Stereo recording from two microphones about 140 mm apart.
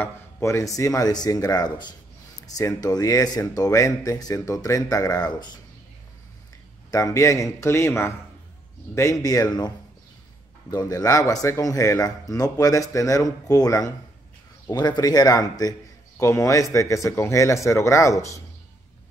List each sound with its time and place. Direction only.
0.0 s speech: 20° left (ahead or behind)
6.9 s speech: 25° left (ahead or behind)